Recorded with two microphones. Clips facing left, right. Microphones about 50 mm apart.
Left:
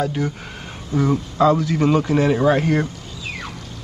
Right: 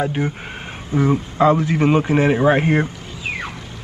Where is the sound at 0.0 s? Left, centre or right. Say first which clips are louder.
Right 1 dB; right.